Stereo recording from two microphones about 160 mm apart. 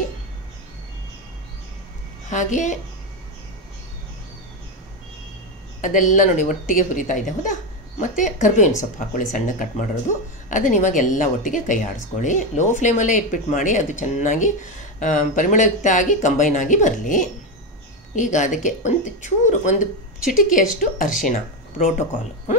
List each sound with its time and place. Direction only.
2.2 s speech: 50° left (ahead or behind)
5.8 s speech: 55° left (ahead or behind)